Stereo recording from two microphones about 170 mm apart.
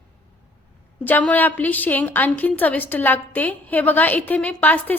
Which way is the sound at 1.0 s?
10° left (ahead or behind).